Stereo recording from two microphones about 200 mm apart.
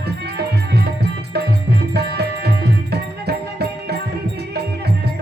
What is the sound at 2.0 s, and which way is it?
Music, 55° right (ahead or behind).